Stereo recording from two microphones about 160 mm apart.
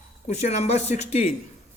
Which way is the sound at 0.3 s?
45° left (ahead or behind).